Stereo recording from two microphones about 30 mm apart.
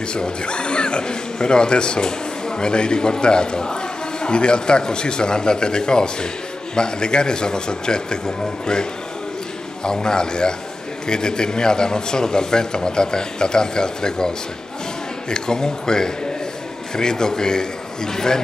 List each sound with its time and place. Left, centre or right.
0.1 s speech: left
9.8 s speech: left